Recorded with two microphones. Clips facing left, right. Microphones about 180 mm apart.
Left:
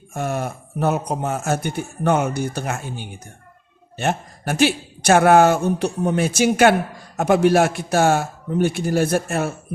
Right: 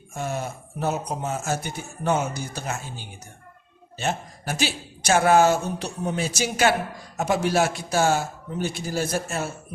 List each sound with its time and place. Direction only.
0.1 s a man's voice: 60° left (ahead or behind)